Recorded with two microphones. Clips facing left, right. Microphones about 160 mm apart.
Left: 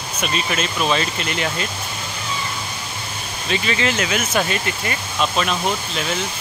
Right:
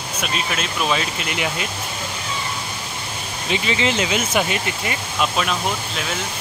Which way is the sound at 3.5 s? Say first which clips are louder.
Even; 20° right (ahead or behind).